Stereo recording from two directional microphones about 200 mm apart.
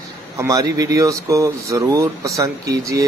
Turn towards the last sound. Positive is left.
turn(degrees=-15)  # may be behind; listen again after turning